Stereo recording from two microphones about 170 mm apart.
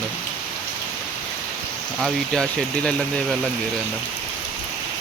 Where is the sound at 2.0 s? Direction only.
5° left (ahead or behind).